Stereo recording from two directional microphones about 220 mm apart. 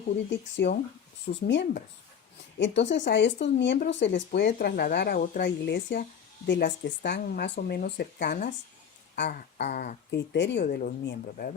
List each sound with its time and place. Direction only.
0.3 s a woman's voice: 55° left (ahead or behind)